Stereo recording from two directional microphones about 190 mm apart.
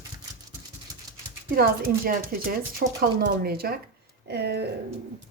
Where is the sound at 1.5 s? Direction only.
50° right (ahead or behind).